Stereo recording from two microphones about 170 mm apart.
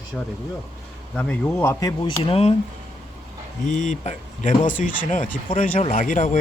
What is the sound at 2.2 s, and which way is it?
Speech, 35° left (ahead or behind).